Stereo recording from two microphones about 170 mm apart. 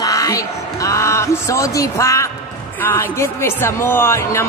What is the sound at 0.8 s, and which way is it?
A woman's voice, 15° left (ahead or behind).